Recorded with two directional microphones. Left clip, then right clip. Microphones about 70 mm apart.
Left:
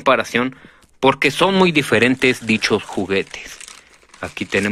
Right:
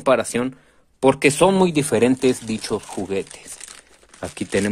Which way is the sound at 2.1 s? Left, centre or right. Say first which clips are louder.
Left 4 dB; centre.